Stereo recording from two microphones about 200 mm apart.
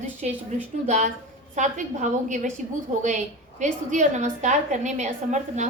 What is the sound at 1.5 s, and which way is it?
A woman's voice, 35° right (ahead or behind).